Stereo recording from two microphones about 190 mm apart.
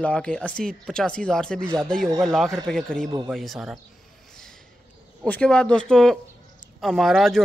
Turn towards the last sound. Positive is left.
turn(degrees=0)  # may be behind; listen again after turning